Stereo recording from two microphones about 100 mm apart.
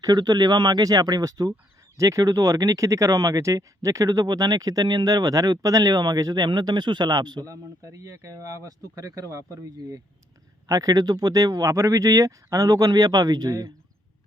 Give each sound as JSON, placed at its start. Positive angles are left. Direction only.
{"t": 0.0, "sound": "speech", "side_deg": -40}
{"t": 7.5, "sound": "speech", "side_deg": -35}